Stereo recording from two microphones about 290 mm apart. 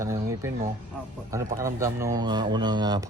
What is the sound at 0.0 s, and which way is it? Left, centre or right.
Speech, centre.